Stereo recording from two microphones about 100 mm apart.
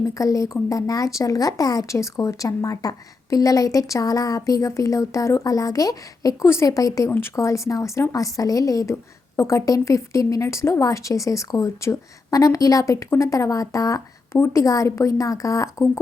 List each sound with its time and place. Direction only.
0.1 s a woman's voice: 35° left (ahead or behind)